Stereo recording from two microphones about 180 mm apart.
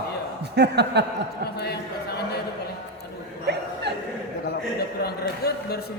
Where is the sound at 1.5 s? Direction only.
65° left (ahead or behind).